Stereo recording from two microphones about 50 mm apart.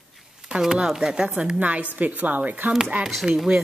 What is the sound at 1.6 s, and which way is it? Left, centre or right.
Speech, right.